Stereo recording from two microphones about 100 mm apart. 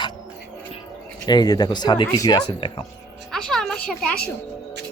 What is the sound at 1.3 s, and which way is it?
Speech, 45° left (ahead or behind).